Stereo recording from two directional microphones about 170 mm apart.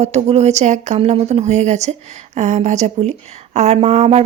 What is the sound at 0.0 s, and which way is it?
Speech, 40° right (ahead or behind).